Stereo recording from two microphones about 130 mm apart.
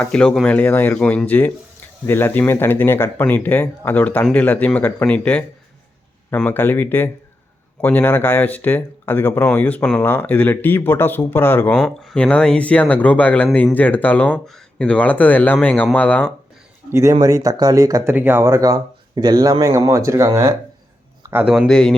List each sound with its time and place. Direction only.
0.0 s speech: 5° left (ahead or behind)
11.7 s speech: 5° left (ahead or behind)
16.9 s speech: 25° right (ahead or behind)
18.1 s speech: 15° right (ahead or behind)
21.4 s speech: 5° right (ahead or behind)
21.7 s speech: 5° left (ahead or behind)